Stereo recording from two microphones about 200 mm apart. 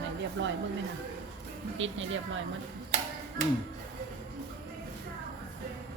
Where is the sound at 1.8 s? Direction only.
70° right (ahead or behind).